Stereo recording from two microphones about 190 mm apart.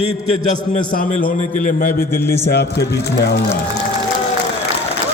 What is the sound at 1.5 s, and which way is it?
A man's voice, 45° left (ahead or behind).